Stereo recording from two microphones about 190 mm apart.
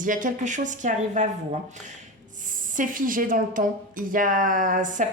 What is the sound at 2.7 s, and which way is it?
A woman's voice, 45° right (ahead or behind).